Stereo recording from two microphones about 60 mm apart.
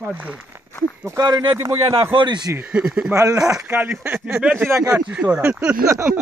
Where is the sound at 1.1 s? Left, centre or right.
Right.